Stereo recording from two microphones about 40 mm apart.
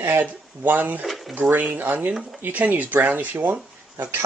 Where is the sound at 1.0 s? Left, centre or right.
Centre.